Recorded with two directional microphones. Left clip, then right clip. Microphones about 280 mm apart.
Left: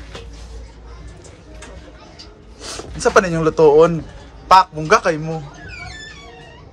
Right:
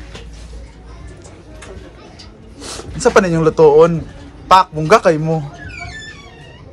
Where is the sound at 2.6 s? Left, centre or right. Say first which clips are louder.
Right 3 dB; centre.